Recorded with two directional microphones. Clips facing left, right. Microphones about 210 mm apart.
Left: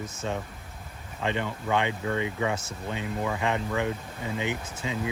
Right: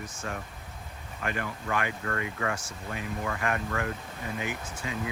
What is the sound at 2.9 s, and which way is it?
Speech, 90° left.